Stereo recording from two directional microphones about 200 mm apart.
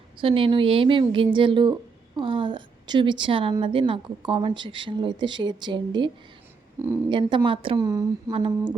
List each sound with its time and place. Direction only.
0.2 s a woman's voice: 25° right (ahead or behind)
7.1 s a woman's voice: 25° right (ahead or behind)